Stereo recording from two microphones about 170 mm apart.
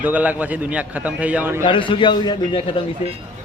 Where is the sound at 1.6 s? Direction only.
30° left (ahead or behind).